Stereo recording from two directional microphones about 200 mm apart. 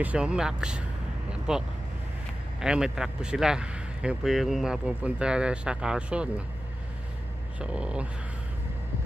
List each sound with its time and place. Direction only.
0.0 s speech: 5° right (ahead or behind)
7.5 s speech: 5° right (ahead or behind)